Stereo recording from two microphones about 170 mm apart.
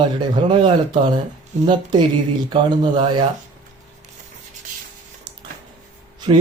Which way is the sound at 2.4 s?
25° right (ahead or behind).